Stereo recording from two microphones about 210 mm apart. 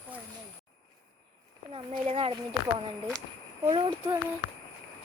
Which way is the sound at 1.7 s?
25° right (ahead or behind).